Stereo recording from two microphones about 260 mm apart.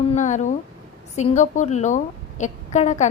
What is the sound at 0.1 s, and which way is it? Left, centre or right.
A woman's voice, left.